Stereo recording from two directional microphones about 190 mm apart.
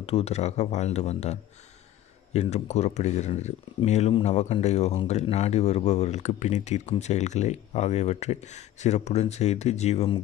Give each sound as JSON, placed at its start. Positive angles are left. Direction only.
{"t": 0.0, "sound": "speech", "side_deg": 35}